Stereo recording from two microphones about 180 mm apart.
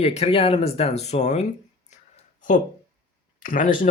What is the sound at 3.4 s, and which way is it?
Speech, 50° left (ahead or behind).